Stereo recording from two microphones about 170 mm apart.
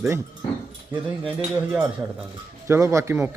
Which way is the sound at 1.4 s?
10° right (ahead or behind).